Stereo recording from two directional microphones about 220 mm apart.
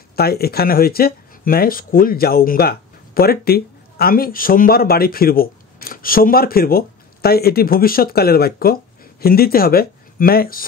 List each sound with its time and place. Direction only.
0.1 s speech: 45° left (ahead or behind)